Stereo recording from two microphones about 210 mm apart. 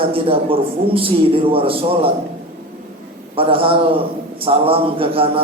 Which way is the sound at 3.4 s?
25° right (ahead or behind).